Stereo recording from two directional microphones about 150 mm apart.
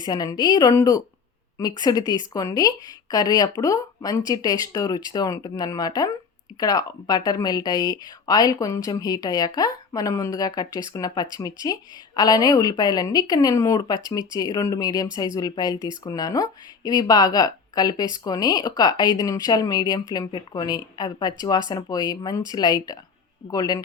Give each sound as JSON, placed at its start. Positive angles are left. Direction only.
{"t": 0.0, "sound": "speech", "side_deg": 25}